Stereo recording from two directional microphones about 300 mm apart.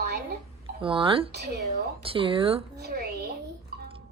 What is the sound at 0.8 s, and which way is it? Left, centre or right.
Speech, centre.